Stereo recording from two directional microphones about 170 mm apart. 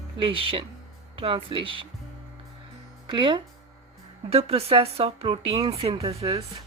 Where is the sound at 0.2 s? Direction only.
30° right (ahead or behind).